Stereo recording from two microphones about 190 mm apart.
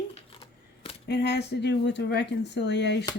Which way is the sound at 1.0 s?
60° left (ahead or behind).